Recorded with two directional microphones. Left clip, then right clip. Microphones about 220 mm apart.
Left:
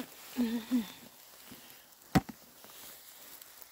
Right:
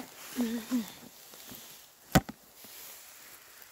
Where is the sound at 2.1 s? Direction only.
55° right (ahead or behind).